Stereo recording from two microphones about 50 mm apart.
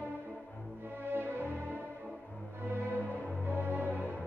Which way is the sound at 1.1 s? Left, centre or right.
Right.